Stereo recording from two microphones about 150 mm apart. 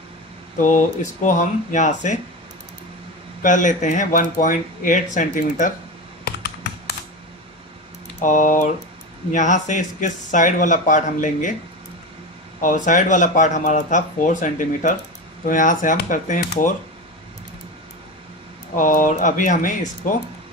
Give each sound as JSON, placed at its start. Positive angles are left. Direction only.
{"t": 0.6, "sound": "speech", "side_deg": 60}
{"t": 3.4, "sound": "speech", "side_deg": 55}
{"t": 6.2, "sound": "computer keyboard", "side_deg": 90}
{"t": 8.2, "sound": "speech", "side_deg": 60}
{"t": 12.6, "sound": "speech", "side_deg": 60}
{"t": 18.8, "sound": "speech", "side_deg": 60}